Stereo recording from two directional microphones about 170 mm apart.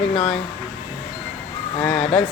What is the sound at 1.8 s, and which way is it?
Speech, 5° left (ahead or behind).